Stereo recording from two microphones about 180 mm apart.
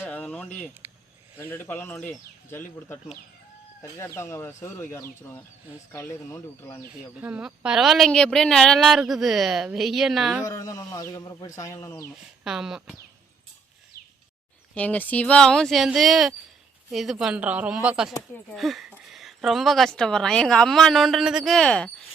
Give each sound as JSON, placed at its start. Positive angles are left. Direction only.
{"t": 0.0, "sound": "a sound", "side_deg": 10}
{"t": 1.4, "sound": "speech", "side_deg": 10}
{"t": 7.2, "sound": "a woman's voice", "side_deg": -5}
{"t": 10.4, "sound": "speech", "side_deg": 20}
{"t": 12.5, "sound": "a woman's voice", "side_deg": -5}
{"t": 14.8, "sound": "a woman's voice", "side_deg": 10}